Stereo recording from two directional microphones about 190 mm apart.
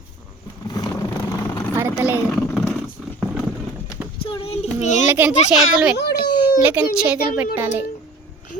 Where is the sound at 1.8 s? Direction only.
10° right (ahead or behind).